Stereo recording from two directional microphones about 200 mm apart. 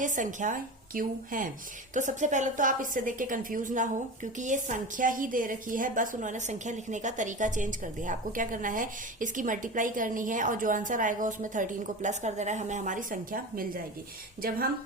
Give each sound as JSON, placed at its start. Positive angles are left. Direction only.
{"t": 0.0, "sound": "a woman's voice", "side_deg": -40}